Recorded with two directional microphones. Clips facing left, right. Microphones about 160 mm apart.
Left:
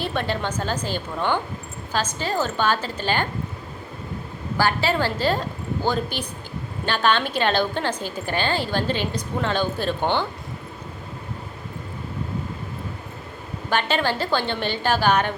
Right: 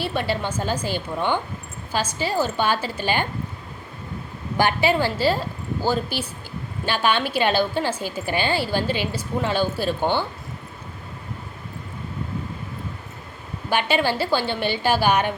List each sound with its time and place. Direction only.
0.0 s a woman's voice: 10° right (ahead or behind)
4.5 s a woman's voice: 15° right (ahead or behind)
13.7 s a woman's voice: 10° right (ahead or behind)